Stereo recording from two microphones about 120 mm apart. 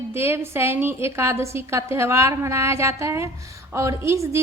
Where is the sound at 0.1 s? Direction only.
20° right (ahead or behind).